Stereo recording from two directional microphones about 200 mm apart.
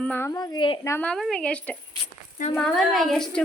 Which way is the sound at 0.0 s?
10° left (ahead or behind).